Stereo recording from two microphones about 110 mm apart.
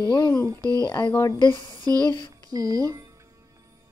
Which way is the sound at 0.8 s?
45° left (ahead or behind).